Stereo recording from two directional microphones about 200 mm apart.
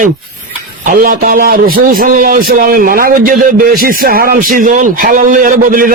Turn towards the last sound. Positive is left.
turn(degrees=-45)  # may be behind; listen again after turning